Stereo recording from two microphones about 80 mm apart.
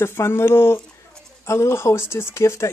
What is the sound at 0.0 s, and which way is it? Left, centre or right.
Speech, left.